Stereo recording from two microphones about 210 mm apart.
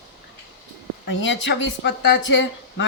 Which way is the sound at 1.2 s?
60° left (ahead or behind).